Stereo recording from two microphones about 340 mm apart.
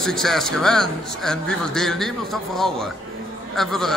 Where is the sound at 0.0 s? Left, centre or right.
Centre.